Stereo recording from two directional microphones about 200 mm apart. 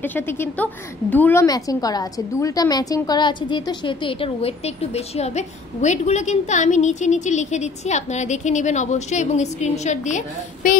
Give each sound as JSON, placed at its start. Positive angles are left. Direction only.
{"t": 0.0, "sound": "a woman's voice", "side_deg": 10}